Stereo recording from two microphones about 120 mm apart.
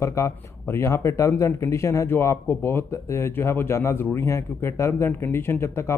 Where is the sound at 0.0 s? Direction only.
25° left (ahead or behind).